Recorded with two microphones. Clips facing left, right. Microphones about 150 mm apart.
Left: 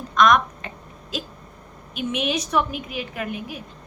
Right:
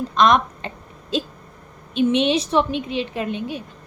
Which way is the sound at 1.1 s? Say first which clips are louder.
Right 8 dB; 30° right (ahead or behind).